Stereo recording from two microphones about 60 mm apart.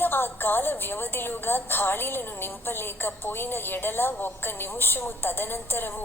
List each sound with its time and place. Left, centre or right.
0.0 s a woman's voice: left